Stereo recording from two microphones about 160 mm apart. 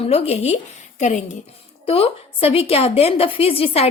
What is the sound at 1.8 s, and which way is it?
Speech, 35° left (ahead or behind).